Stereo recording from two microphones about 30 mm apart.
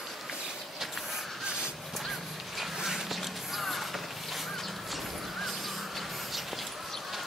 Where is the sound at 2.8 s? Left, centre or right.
Centre.